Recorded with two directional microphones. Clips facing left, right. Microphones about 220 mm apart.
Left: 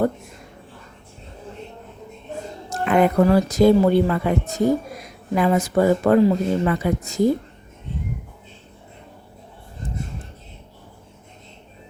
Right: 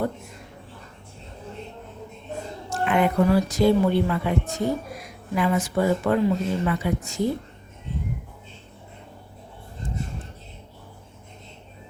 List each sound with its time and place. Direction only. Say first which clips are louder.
2.6 s a woman's voice: left 4 dB; 40° left (ahead or behind)